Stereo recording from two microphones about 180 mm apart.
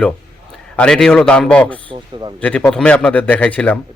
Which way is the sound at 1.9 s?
25° right (ahead or behind).